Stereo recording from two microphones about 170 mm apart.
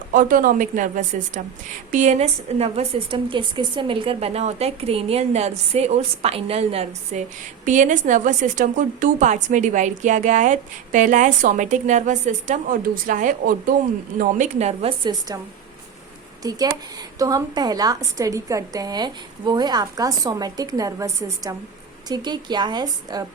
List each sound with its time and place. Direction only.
0.1 s a woman's voice: 55° right (ahead or behind); by 15.4 s 30° right (ahead or behind)
16.4 s a woman's voice: 20° right (ahead or behind)